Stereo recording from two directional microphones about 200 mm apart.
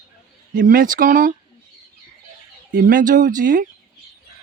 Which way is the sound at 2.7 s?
45° right (ahead or behind).